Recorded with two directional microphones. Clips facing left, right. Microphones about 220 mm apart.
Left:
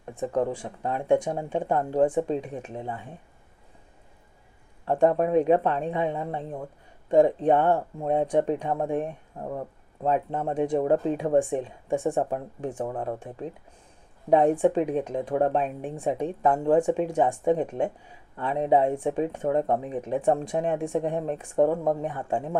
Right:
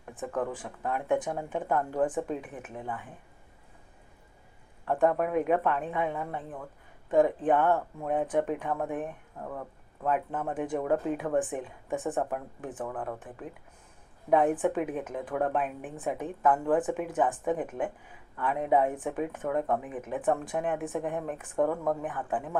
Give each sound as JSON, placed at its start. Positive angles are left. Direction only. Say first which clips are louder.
{"t": 0.2, "sound": "speech", "louder": "left 6 dB", "side_deg": 25}
{"t": 4.9, "sound": "speech", "louder": "left 4 dB", "side_deg": 25}